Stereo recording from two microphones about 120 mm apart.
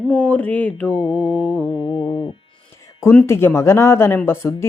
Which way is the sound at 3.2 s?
20° left (ahead or behind).